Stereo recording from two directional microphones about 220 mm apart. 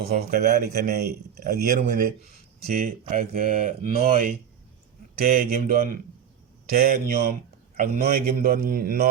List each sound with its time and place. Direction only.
0.0 s speech: 45° right (ahead or behind)
5.2 s speech: 40° right (ahead or behind)